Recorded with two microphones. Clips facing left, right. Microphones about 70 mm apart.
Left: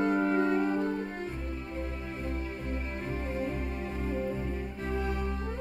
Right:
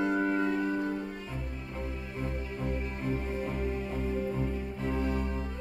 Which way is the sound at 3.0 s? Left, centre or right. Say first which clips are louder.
Right 1 dB; left.